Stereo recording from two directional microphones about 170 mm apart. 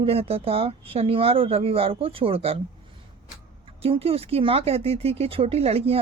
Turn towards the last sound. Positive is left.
turn(degrees=-35)  # may be behind; listen again after turning